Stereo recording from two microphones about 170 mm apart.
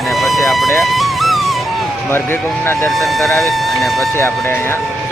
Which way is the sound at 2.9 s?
Centre (ahead or behind).